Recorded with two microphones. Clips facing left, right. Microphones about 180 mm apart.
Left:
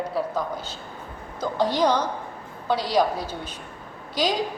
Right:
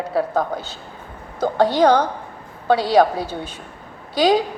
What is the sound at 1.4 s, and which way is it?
Speech, 65° right (ahead or behind).